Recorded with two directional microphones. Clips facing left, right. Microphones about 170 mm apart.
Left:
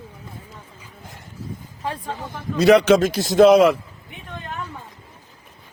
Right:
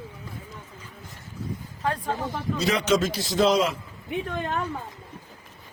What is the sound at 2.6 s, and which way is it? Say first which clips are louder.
A man's voice: left 10 dB; 65° left (ahead or behind).